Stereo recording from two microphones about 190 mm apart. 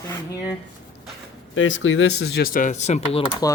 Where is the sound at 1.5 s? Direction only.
90° left; by 3.2 s 35° left (ahead or behind).